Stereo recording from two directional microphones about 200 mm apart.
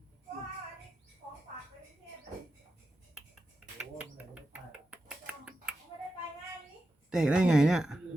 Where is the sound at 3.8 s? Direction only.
5° right (ahead or behind).